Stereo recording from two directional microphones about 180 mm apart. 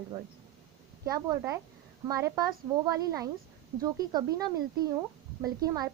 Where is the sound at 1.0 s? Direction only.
15° right (ahead or behind).